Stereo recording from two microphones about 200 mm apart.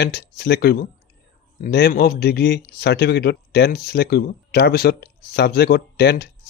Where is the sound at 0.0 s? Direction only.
55° left (ahead or behind).